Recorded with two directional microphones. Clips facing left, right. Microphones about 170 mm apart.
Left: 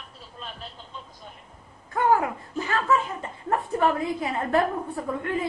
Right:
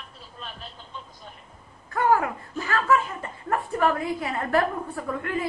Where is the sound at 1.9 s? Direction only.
20° left (ahead or behind).